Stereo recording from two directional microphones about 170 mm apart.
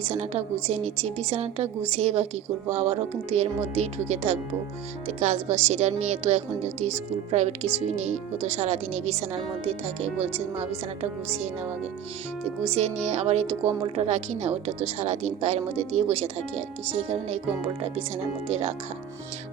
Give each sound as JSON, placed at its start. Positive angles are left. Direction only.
{"t": 0.0, "sound": "a woman's voice", "side_deg": -40}
{"t": 12.6, "sound": "a woman's voice", "side_deg": -40}